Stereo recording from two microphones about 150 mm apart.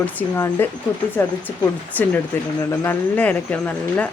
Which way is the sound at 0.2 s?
15° left (ahead or behind).